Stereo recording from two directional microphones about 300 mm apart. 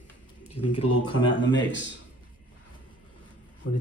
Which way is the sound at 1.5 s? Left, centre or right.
Left.